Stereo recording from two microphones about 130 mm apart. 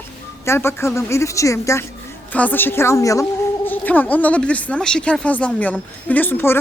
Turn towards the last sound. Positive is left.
turn(degrees=15)  # may be behind; listen again after turning